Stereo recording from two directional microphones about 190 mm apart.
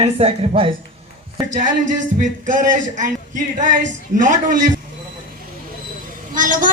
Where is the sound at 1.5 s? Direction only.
40° right (ahead or behind).